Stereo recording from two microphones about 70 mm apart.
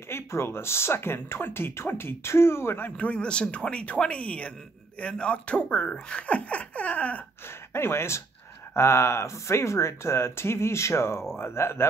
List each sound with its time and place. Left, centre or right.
0.1 s speech: left
3.0 s speech: centre
7.7 s speech: left